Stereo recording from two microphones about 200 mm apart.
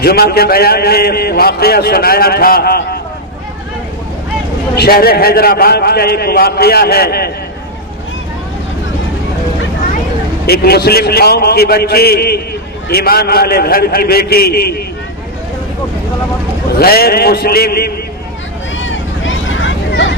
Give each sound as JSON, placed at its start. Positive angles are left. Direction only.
{"t": 0.0, "sound": "a man's voice", "side_deg": 50}
{"t": 4.7, "sound": "a man's voice", "side_deg": 50}
{"t": 10.4, "sound": "a man's voice", "side_deg": 50}
{"t": 16.7, "sound": "a man's voice", "side_deg": 50}
{"t": 18.8, "sound": "vehicle", "side_deg": 70}